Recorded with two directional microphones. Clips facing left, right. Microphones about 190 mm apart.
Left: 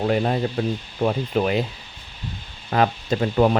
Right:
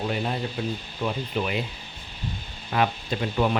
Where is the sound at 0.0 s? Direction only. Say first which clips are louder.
Left 7 dB; 55° left (ahead or behind).